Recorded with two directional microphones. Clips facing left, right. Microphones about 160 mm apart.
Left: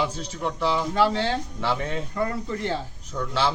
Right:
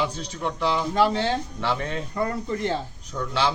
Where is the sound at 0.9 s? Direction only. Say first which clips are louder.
Right 2 dB; 15° right (ahead or behind).